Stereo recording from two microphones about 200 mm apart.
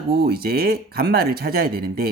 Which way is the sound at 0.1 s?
50° right (ahead or behind).